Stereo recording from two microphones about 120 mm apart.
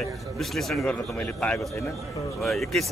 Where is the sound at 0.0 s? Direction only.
Centre (ahead or behind).